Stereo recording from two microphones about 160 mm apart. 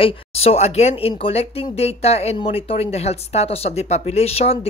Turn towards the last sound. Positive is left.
turn(degrees=40)  # may be behind; listen again after turning